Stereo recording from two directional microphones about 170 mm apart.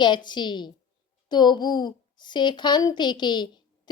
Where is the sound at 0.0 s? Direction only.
25° left (ahead or behind).